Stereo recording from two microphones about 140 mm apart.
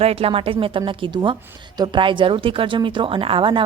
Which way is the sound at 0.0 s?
45° right (ahead or behind).